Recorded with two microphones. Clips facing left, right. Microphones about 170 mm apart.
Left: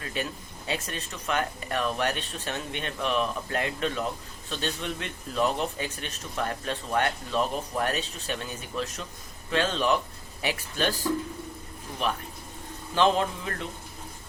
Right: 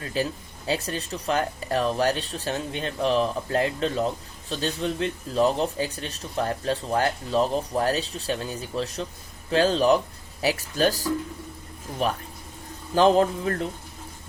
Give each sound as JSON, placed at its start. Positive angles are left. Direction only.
{"t": 0.2, "sound": "speech", "side_deg": -35}